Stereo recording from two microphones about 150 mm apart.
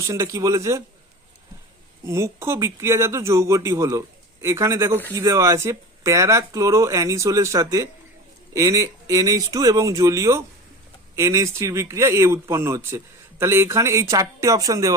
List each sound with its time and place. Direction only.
0.1 s speech: 20° right (ahead or behind)
2.0 s speech: 20° right (ahead or behind)